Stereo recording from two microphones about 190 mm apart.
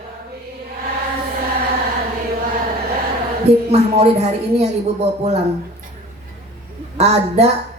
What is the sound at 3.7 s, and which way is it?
Speech, 35° right (ahead or behind).